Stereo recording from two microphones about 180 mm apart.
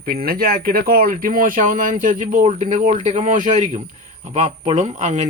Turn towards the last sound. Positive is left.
turn(degrees=-40)  # may be behind; listen again after turning